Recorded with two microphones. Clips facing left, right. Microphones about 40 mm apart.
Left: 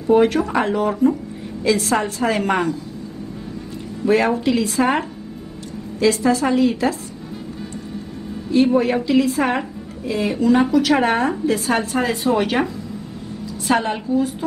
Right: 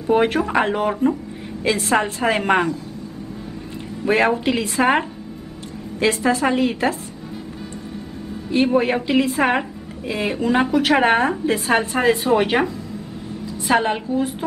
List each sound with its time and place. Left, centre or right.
0.1 s a woman's voice: right
4.3 s a woman's voice: right
8.7 s a woman's voice: right
13.7 s a woman's voice: centre